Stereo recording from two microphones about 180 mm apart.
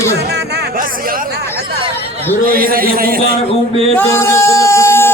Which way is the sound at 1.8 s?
35° right (ahead or behind).